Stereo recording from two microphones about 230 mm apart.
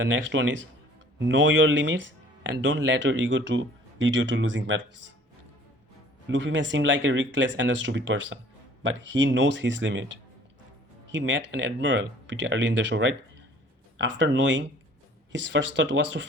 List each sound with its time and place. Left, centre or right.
0.0 s speech: right
6.2 s speech: right
11.1 s speech: right